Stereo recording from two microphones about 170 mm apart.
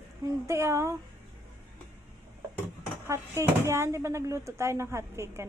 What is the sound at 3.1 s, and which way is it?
Speech, 15° right (ahead or behind).